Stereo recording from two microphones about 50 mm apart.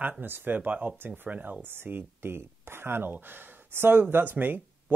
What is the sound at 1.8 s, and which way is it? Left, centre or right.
Speech, right.